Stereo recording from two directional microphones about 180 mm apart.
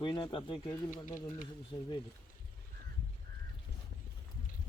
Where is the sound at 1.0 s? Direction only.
45° left (ahead or behind).